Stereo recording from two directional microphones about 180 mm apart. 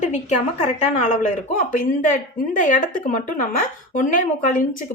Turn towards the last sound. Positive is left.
turn(degrees=45)  # may be behind; listen again after turning